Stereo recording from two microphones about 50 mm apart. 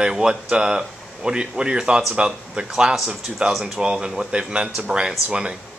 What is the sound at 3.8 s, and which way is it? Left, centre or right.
Speech, centre.